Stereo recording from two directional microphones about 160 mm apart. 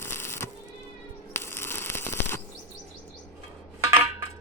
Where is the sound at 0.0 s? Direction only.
15° left (ahead or behind).